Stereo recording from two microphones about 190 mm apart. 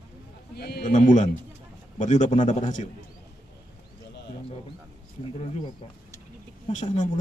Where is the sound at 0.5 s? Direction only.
55° left (ahead or behind).